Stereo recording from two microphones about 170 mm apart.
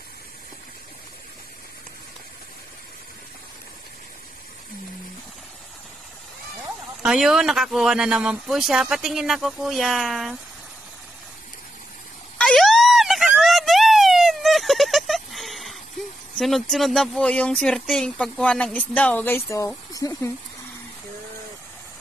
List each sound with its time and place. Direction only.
7.0 s speech: 5° right (ahead or behind)
12.4 s a sound: 5° left (ahead or behind)
16.3 s speech: centre (ahead or behind); by 20.3 s 20° left (ahead or behind)